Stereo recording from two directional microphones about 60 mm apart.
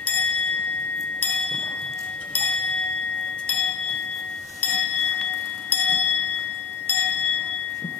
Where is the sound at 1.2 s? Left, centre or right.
Centre.